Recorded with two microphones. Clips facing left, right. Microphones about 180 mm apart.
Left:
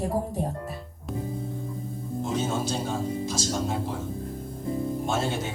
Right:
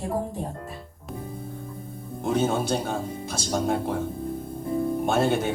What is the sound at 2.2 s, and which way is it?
Speech, 60° right (ahead or behind).